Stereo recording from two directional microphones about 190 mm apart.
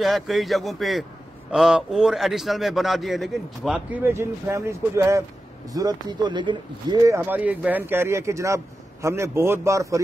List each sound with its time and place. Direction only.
0.0 s a man's voice: centre (ahead or behind); by 9.9 s 15° right (ahead or behind)